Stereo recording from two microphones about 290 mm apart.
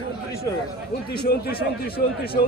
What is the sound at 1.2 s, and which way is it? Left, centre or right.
Speech, left.